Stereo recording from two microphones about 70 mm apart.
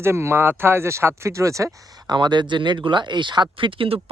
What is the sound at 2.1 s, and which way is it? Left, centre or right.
Speech, right.